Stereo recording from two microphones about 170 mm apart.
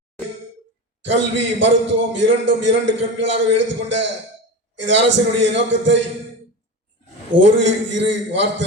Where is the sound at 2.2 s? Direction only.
90° right.